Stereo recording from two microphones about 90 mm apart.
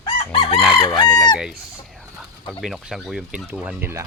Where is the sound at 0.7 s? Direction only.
40° left (ahead or behind).